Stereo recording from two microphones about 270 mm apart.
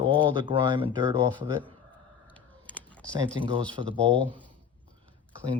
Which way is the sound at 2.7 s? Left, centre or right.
Centre.